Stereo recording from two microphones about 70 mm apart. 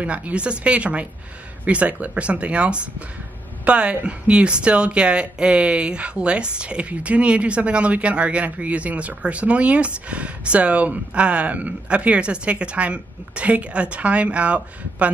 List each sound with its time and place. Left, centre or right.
0.0 s speech: centre